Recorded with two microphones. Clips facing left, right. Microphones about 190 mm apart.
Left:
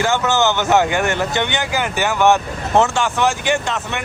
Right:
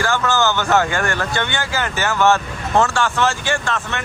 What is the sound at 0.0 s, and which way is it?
Speech, 20° left (ahead or behind).